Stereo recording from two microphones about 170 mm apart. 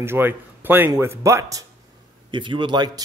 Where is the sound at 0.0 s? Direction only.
15° right (ahead or behind).